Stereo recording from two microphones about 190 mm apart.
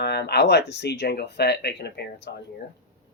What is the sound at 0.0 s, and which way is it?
Speech, 60° left (ahead or behind).